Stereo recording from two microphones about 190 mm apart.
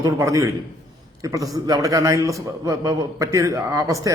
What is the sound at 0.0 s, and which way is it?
A man's voice, 15° right (ahead or behind).